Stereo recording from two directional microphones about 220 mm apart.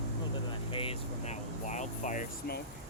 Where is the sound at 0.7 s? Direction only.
25° left (ahead or behind).